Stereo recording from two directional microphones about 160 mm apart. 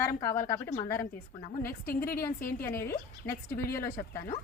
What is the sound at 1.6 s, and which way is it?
A woman's voice, 65° left (ahead or behind).